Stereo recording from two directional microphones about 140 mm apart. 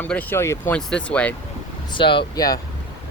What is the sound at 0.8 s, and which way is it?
Speech, 5° left (ahead or behind).